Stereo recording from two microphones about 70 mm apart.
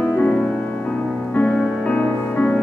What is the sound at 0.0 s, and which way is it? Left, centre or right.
Music, centre.